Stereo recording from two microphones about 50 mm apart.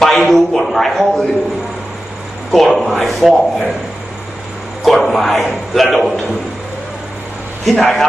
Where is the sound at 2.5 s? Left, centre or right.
Centre.